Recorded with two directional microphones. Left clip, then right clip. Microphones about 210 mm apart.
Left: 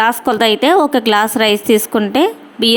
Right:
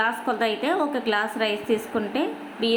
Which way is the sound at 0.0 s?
45° left (ahead or behind).